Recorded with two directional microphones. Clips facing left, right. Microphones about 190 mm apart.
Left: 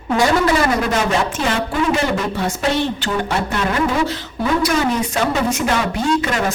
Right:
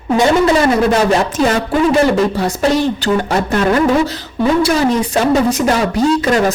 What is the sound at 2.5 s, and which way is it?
Speech, 40° right (ahead or behind).